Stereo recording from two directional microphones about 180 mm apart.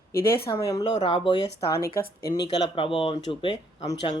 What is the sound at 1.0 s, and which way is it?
Speech, 30° left (ahead or behind).